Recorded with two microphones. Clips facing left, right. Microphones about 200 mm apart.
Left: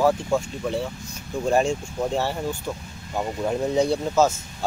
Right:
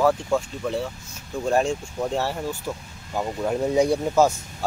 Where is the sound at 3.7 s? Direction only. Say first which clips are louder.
Right 2 dB; 10° right (ahead or behind).